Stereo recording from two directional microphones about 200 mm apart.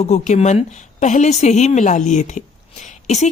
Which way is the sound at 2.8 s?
35° left (ahead or behind).